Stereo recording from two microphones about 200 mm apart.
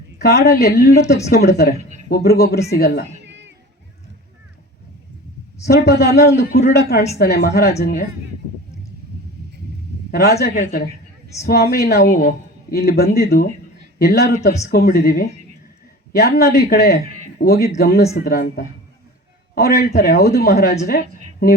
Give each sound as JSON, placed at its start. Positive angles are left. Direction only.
{"t": 0.2, "sound": "a man's voice", "side_deg": 55}
{"t": 3.2, "sound": "a sound", "side_deg": -65}
{"t": 5.6, "sound": "a man's voice", "side_deg": 55}
{"t": 10.1, "sound": "a man's voice", "side_deg": 50}